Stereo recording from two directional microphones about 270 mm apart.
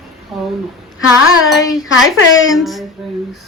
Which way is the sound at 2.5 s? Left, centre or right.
Centre.